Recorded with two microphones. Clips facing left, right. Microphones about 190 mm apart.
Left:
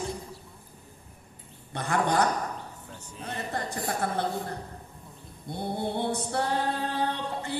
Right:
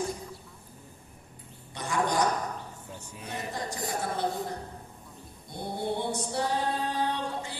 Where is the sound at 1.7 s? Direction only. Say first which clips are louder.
Left 2 dB; 60° left (ahead or behind).